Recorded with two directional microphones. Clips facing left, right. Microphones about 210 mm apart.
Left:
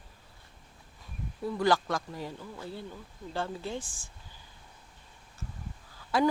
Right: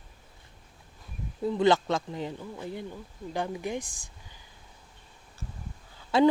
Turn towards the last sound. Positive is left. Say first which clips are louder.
# right 5 dB
turn(degrees=-25)  # may be behind; listen again after turning